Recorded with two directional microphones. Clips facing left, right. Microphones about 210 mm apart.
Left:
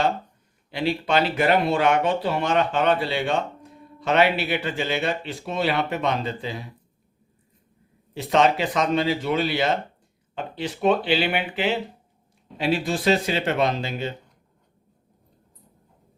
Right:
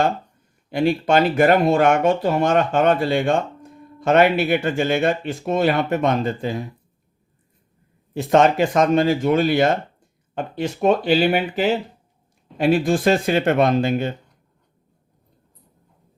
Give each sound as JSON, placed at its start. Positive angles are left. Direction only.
{"t": 0.7, "sound": "speech", "side_deg": -50}
{"t": 8.1, "sound": "speech", "side_deg": -50}